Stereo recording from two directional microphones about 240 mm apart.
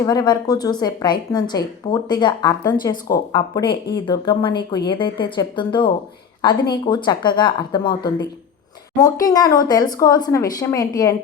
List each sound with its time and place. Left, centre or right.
0.0 s a woman's voice: centre